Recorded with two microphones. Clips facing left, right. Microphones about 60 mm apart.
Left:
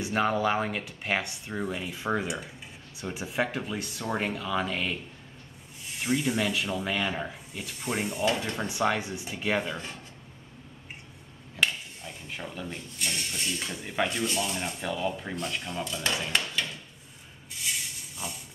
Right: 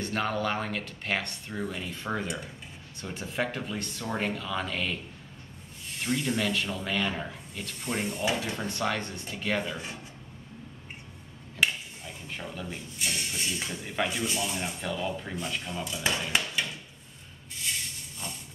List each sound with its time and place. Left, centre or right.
0.0 s speech: centre
11.5 s speech: centre
16.3 s hammer: centre
17.6 s a sound: centre